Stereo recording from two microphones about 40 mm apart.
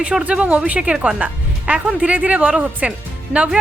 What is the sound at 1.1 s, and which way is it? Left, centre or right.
Music, right.